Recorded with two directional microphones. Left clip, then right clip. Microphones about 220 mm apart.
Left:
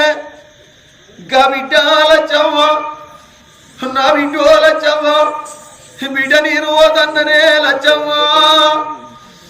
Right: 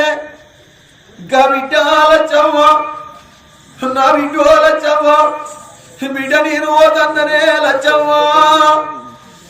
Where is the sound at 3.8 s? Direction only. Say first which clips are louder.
Right 1 dB; centre (ahead or behind).